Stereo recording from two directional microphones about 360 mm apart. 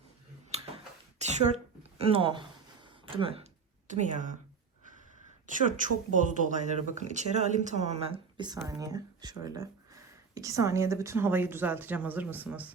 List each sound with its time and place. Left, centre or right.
0.5 s tick-tock: centre
1.2 s a sound: centre
3.2 s speech: centre
5.5 s speech: right; by 12.7 s centre